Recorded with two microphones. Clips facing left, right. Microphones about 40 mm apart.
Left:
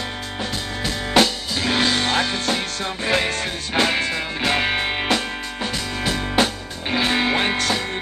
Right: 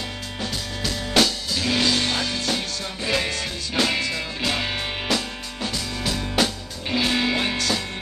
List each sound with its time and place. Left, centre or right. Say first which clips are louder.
0.4 s music: left 2 dB; left